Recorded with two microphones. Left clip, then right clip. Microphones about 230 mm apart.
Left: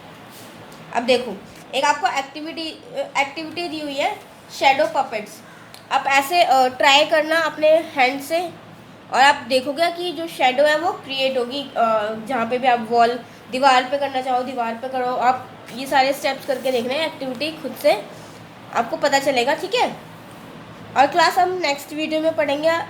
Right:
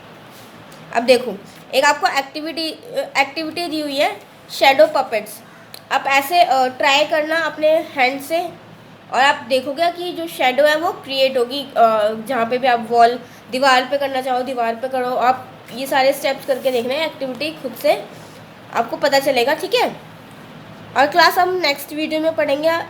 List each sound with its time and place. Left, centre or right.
0.9 s a woman's voice: right
1.7 s a woman's voice: right
5.9 s a woman's voice: centre
6.3 s a woman's voice: centre; by 19.9 s right
20.9 s a woman's voice: centre